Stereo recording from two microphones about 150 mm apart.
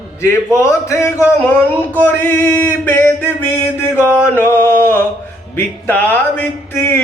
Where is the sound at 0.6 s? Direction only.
20° left (ahead or behind).